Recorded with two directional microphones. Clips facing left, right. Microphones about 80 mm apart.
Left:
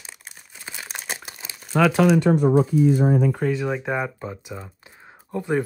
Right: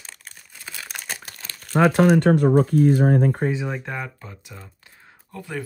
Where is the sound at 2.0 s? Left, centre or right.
Right.